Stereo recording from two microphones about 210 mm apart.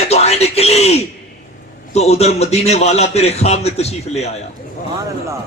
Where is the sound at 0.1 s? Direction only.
30° left (ahead or behind).